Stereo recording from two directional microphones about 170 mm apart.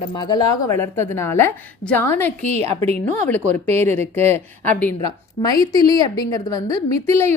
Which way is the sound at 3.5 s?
40° right (ahead or behind).